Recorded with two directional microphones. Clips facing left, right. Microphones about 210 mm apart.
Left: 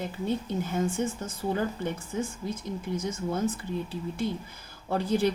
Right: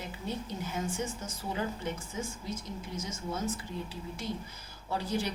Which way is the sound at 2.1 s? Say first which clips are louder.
Left 6 dB; 55° left (ahead or behind).